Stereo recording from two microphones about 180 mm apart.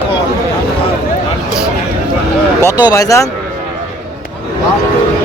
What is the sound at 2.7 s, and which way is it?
Speech, 20° left (ahead or behind).